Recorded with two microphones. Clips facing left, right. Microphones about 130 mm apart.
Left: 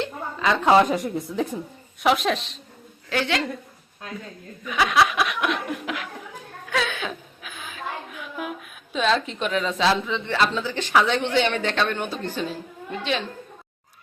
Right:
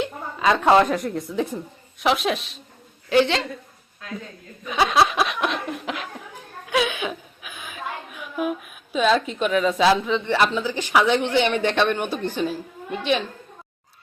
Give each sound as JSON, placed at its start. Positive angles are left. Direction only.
{"t": 0.0, "sound": "a sound", "side_deg": -15}
{"t": 0.6, "sound": "a woman's voice", "side_deg": 0}
{"t": 3.1, "sound": "a woman's voice", "side_deg": -25}
{"t": 4.6, "sound": "laughter", "side_deg": -25}
{"t": 6.7, "sound": "chuckle", "side_deg": -15}
{"t": 8.9, "sound": "speech", "side_deg": -5}